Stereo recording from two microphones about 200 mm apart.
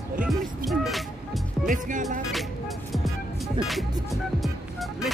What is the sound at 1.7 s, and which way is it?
Music, 40° right (ahead or behind).